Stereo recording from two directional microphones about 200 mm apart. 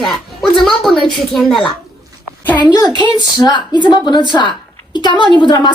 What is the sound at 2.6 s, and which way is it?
A woman's voice, 20° left (ahead or behind).